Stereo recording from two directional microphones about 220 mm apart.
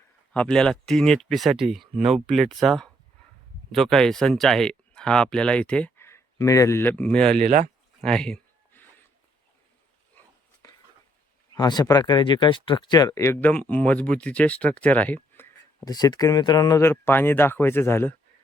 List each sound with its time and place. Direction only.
0.3 s speech: 5° left (ahead or behind)
7.3 s speech: 35° right (ahead or behind)
8.0 s a sound: 5° left (ahead or behind)
11.5 s speech: 20° left (ahead or behind)